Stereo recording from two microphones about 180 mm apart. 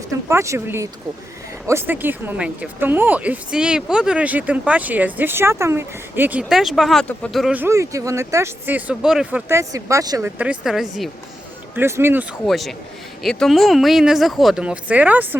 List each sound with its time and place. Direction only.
0.1 s speech: 15° right (ahead or behind)
9.5 s speech: 15° right (ahead or behind)
11.7 s speech: 15° right (ahead or behind)
12.5 s speech: centre (ahead or behind)